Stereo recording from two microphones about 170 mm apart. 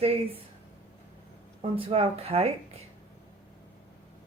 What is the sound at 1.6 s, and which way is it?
A woman's voice, 35° right (ahead or behind).